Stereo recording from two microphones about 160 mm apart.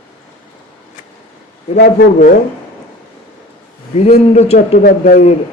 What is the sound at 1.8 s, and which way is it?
Speech, 80° left.